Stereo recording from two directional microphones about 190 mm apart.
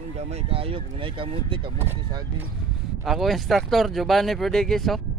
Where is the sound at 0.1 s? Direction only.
35° right (ahead or behind).